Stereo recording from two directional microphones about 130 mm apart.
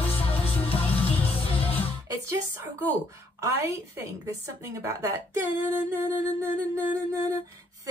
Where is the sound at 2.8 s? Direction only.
25° right (ahead or behind).